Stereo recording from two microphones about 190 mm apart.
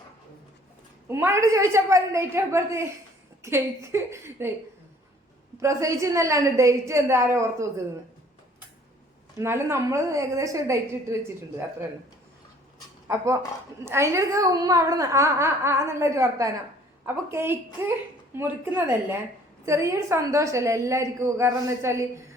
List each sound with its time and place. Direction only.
1.0 s a woman's voice: 15° right (ahead or behind)
5.5 s a woman's voice: 15° right (ahead or behind)
9.4 s a woman's voice: 15° right (ahead or behind)
13.1 s a woman's voice: 15° right (ahead or behind)